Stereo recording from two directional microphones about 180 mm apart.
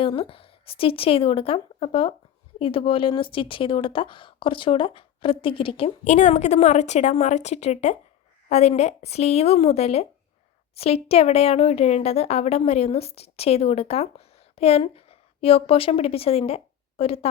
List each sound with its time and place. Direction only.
0.0 s a woman's voice: 30° left (ahead or behind)